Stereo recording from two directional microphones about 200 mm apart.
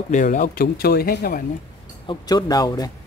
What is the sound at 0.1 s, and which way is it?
Speech, 40° left (ahead or behind).